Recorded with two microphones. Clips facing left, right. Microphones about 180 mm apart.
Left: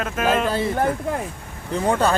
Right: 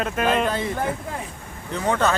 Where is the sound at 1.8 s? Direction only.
10° left (ahead or behind).